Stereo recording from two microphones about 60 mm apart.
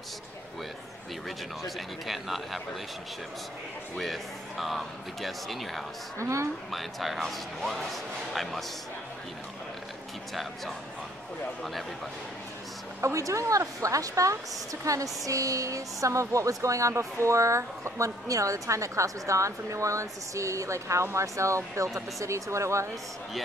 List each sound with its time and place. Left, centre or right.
1.8 s speech: centre
3.9 s speech: centre
6.1 s a woman's voice: right
6.7 s speech: centre
13.0 s a woman's voice: right